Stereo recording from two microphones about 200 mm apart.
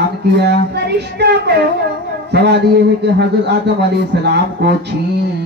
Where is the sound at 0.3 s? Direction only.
60° right (ahead or behind).